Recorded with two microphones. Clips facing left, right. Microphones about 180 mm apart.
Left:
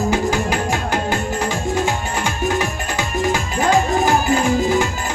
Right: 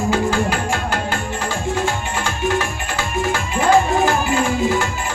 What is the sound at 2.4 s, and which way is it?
Music, 40° left (ahead or behind).